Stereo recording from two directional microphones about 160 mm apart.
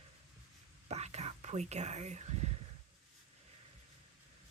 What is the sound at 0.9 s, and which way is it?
Whispering, 45° right (ahead or behind).